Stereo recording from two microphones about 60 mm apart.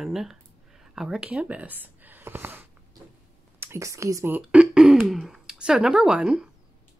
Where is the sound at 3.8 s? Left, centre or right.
Right.